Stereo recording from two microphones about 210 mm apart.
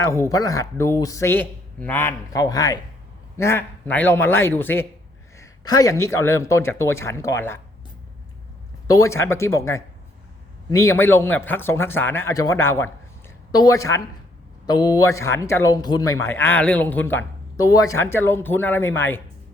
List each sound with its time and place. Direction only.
0.0 s speech: 15° left (ahead or behind)
8.9 s speech: 15° left (ahead or behind)